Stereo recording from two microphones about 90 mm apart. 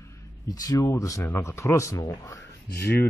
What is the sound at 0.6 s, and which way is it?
Speech, 35° left (ahead or behind).